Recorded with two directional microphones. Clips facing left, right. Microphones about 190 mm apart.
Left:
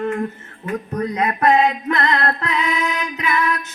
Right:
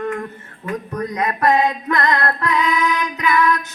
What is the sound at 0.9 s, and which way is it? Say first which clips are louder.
Music: left 2 dB; 25° left (ahead or behind).